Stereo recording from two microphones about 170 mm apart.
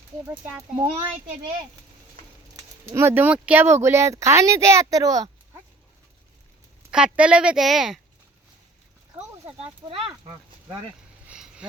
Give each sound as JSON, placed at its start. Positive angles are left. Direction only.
{"t": 0.3, "sound": "speech", "side_deg": -15}
{"t": 2.8, "sound": "speech", "side_deg": -15}
{"t": 6.9, "sound": "speech", "side_deg": -5}
{"t": 9.6, "sound": "speech", "side_deg": -30}
{"t": 11.3, "sound": "a sound", "side_deg": -5}